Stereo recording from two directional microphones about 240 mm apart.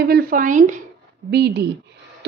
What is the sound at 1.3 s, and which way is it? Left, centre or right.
Speech, right.